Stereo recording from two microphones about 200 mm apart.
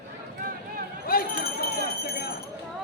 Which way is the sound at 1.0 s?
50° left (ahead or behind).